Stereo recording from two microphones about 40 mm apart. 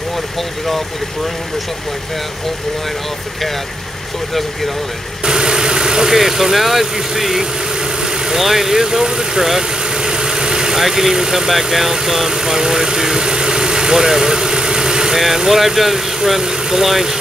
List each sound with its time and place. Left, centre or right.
5.2 s vehicle: centre
6.1 s speech: centre
12.3 s vehicle: centre
15.1 s speech: centre